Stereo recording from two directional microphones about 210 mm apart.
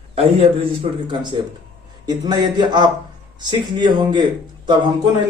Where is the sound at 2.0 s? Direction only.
20° right (ahead or behind).